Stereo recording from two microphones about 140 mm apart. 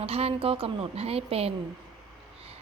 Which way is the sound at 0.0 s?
45° right (ahead or behind).